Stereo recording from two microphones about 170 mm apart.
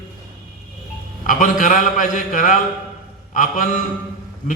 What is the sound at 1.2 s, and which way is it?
A man's voice, 50° left (ahead or behind).